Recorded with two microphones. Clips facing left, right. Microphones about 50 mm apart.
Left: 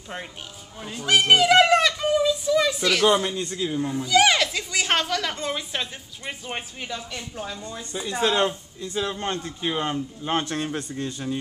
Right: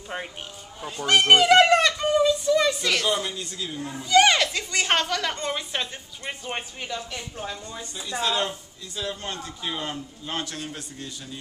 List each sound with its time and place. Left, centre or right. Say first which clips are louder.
0.1 s speech: right 2 dB; centre
0.9 s a sound: right 1 dB; centre
3.1 s speech: left 5 dB; left
3.9 s speech: right 2 dB; centre
7.8 s a man's voice: left 4 dB; left